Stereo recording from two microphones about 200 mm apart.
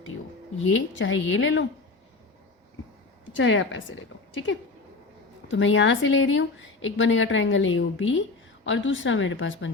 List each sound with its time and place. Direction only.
0.6 s speech: 70° left (ahead or behind)
3.3 s speech: 70° left (ahead or behind)
5.5 s speech: 70° left (ahead or behind)